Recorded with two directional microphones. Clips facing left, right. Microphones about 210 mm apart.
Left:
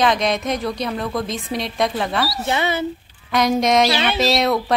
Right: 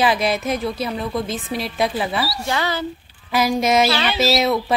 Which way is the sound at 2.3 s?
20° left (ahead or behind).